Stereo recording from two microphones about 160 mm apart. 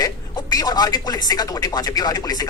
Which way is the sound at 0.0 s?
25° left (ahead or behind).